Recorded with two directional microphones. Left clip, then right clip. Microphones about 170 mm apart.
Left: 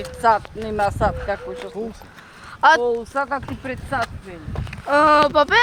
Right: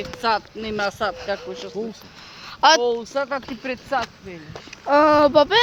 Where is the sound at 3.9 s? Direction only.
15° right (ahead or behind).